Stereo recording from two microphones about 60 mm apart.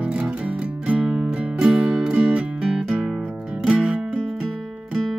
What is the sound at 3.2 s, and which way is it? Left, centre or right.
Music, right.